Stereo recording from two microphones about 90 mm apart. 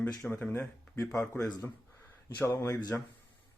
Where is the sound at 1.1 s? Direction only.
35° left (ahead or behind).